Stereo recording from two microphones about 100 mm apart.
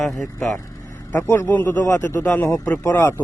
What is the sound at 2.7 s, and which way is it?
Speech, 35° left (ahead or behind).